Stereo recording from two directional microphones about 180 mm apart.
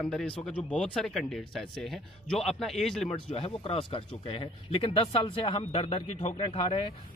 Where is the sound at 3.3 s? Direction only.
30° left (ahead or behind).